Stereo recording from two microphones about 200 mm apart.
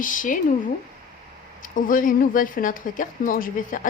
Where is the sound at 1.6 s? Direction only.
40° left (ahead or behind).